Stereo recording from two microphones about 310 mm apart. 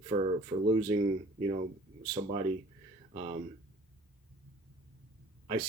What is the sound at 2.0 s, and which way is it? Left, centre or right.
Speech, centre.